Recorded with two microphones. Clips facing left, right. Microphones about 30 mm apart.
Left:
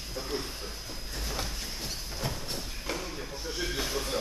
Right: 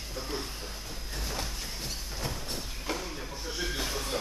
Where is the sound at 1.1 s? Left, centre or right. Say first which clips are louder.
Even; centre.